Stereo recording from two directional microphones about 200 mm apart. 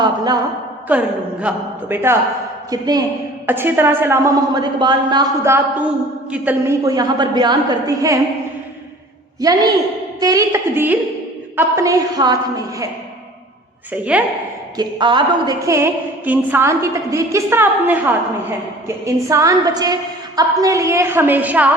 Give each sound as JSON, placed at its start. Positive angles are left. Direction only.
{"t": 0.9, "sound": "a woman's voice", "side_deg": -5}
{"t": 9.4, "sound": "a woman's voice", "side_deg": -20}
{"t": 13.9, "sound": "a woman's voice", "side_deg": -5}
{"t": 14.8, "sound": "a woman's voice", "side_deg": -25}